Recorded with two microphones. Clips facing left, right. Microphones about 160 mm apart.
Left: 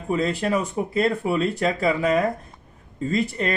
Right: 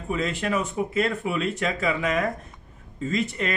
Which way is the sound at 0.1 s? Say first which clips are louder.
Left 4 dB; 35° left (ahead or behind).